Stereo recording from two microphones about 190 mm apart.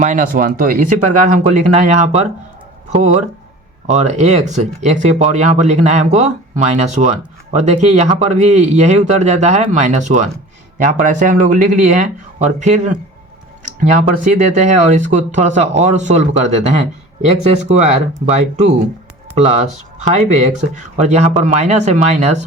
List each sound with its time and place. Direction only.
0.0 s speech: 40° right (ahead or behind)
17.6 s speech: 35° right (ahead or behind)